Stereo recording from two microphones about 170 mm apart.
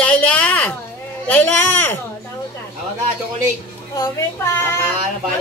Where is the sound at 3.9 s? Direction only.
15° left (ahead or behind).